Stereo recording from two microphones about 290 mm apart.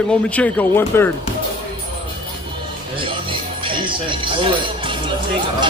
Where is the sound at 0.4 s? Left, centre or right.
Centre.